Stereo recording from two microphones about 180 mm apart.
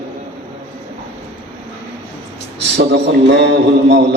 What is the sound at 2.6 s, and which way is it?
A man's voice, 70° right (ahead or behind).